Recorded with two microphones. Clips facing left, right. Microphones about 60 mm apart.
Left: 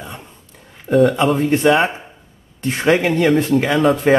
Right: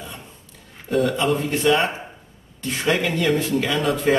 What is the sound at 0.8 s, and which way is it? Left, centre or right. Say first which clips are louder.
Speech: left 7 dB; centre.